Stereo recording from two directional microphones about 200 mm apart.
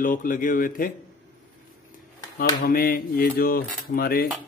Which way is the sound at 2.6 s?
50° left (ahead or behind).